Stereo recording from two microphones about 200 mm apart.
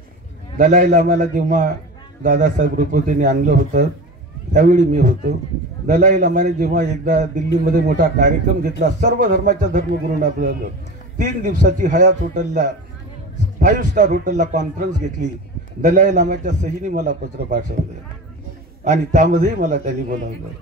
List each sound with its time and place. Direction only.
0.6 s a man's voice: 40° right (ahead or behind)
18.9 s a man's voice: 40° right (ahead or behind)